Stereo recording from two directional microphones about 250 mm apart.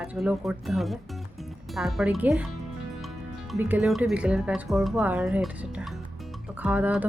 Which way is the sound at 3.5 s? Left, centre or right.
Centre.